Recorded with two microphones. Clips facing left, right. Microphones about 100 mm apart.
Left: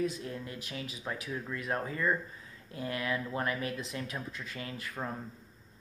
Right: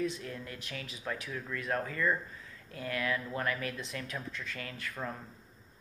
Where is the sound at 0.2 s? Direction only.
25° left (ahead or behind).